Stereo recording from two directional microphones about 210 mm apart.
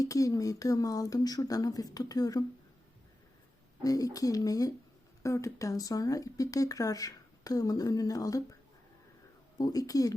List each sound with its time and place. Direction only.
0.0 s speech: 15° left (ahead or behind)
3.8 s speech: 15° left (ahead or behind)
9.6 s speech: 15° left (ahead or behind)